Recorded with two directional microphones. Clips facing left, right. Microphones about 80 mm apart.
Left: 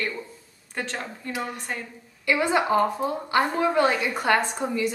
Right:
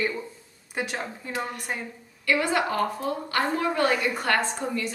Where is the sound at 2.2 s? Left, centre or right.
Centre.